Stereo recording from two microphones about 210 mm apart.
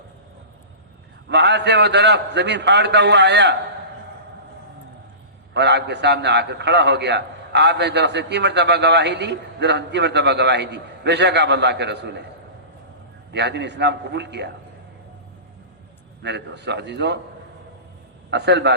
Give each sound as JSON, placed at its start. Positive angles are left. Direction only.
{"t": 1.3, "sound": "a man's voice", "side_deg": -55}
{"t": 5.5, "sound": "a man's voice", "side_deg": -55}
{"t": 13.3, "sound": "a man's voice", "side_deg": -55}
{"t": 16.2, "sound": "a man's voice", "side_deg": -55}
{"t": 18.3, "sound": "a man's voice", "side_deg": -55}